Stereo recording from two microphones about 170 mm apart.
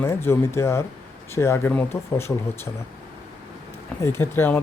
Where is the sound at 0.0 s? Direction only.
15° left (ahead or behind).